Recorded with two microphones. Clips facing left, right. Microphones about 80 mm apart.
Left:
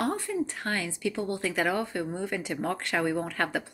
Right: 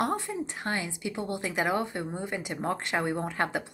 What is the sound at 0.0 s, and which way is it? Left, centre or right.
Speech, right.